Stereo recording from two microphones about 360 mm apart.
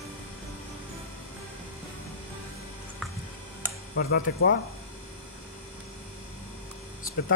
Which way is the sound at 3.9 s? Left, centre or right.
Left.